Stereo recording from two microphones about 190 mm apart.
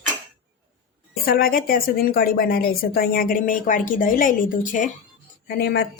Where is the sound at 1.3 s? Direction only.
50° left (ahead or behind).